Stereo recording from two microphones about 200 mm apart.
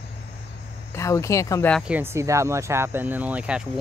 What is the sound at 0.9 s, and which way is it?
Speech, 15° left (ahead or behind).